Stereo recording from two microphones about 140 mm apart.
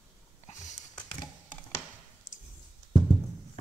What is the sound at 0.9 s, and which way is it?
Typing, 5° left (ahead or behind).